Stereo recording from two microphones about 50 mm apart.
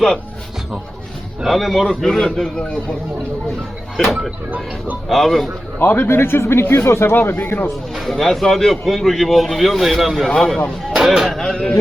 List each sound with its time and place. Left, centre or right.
1.4 s a man's voice: centre
3.9 s a man's voice: centre
5.8 s a man's voice: left
6.1 s speech: left
8.0 s a man's voice: centre
10.2 s a man's voice: centre
10.9 s speech: centre
11.3 s a man's voice: centre